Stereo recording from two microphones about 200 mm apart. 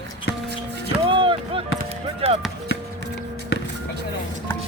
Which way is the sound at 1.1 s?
25° right (ahead or behind).